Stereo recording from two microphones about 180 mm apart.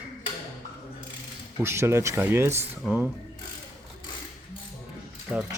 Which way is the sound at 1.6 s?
15° right (ahead or behind).